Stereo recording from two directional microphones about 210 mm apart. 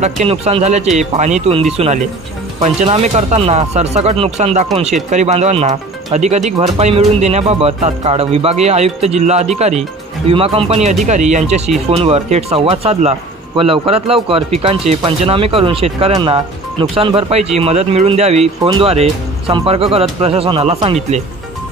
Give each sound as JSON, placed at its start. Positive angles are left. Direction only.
{"t": 0.0, "sound": "speech", "side_deg": -30}